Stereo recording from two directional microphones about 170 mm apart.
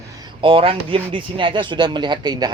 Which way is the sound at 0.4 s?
35° right (ahead or behind).